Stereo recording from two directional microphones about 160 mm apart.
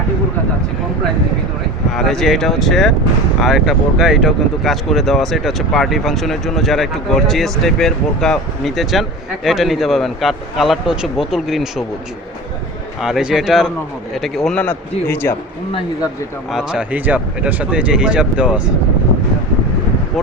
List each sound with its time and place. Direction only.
2.0 s speech: centre (ahead or behind)
13.0 s speech: centre (ahead or behind); by 15.4 s 15° left (ahead or behind)
16.5 s speech: 5° right (ahead or behind)